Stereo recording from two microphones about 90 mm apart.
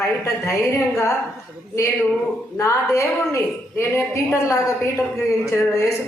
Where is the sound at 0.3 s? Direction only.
35° left (ahead or behind).